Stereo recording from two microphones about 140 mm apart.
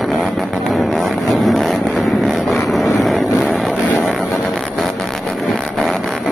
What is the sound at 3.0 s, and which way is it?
Vehicle, centre (ahead or behind).